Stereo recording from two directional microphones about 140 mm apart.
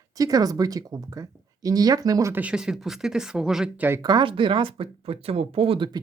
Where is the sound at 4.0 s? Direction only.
30° right (ahead or behind).